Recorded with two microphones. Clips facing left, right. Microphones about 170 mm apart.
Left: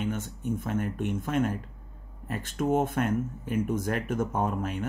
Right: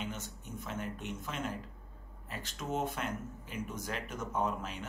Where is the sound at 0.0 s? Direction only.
55° left (ahead or behind).